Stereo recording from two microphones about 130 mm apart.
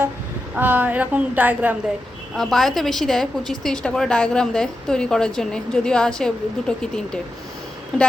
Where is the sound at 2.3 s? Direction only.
Centre (ahead or behind).